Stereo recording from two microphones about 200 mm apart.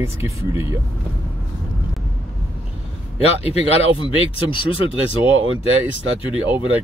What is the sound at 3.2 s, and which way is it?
Speech, 30° left (ahead or behind).